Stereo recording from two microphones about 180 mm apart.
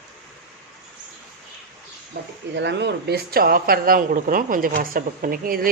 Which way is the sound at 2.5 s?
75° right (ahead or behind).